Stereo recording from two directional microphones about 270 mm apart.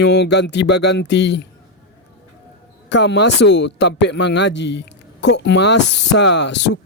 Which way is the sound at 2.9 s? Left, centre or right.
Left.